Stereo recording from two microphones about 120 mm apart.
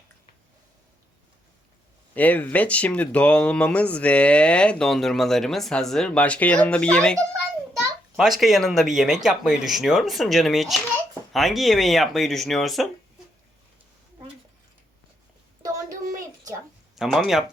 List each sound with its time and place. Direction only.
2.1 s speech: 15° left (ahead or behind)
8.1 s speech: centre (ahead or behind)
15.6 s a sound: 30° right (ahead or behind)
16.9 s speech: centre (ahead or behind)